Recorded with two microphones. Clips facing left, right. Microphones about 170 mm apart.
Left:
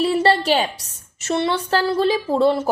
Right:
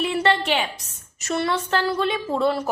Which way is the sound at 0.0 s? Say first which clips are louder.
Left 4 dB; 30° left (ahead or behind).